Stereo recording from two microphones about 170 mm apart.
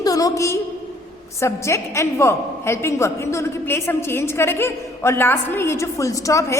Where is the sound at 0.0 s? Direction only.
20° left (ahead or behind).